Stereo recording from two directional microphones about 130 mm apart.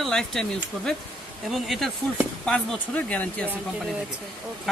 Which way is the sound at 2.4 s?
10° left (ahead or behind).